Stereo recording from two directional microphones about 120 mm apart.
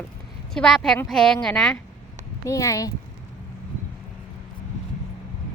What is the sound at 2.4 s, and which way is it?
Speech, 25° left (ahead or behind).